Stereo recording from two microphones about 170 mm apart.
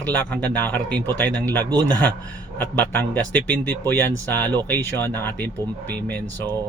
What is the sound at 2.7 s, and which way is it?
Speech, 10° left (ahead or behind).